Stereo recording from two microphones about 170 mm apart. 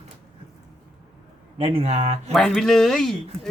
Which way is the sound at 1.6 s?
35° right (ahead or behind).